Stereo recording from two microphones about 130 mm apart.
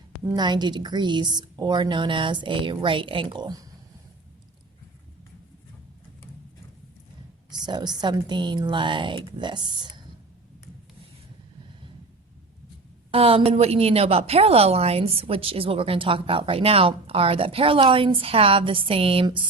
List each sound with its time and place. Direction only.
0.3 s a woman's voice: 35° right (ahead or behind)
7.5 s a woman's voice: 35° right (ahead or behind)
13.1 s a woman's voice: 45° right (ahead or behind)